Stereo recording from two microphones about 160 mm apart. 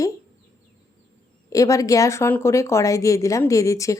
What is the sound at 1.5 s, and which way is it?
Speech, 20° left (ahead or behind).